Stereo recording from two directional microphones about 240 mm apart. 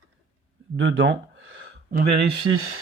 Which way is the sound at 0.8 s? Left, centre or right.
Right.